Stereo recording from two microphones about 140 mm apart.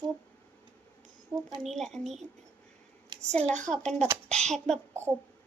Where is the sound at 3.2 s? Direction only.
50° right (ahead or behind).